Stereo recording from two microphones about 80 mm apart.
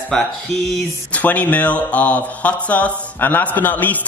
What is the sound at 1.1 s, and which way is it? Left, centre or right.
Speech, centre.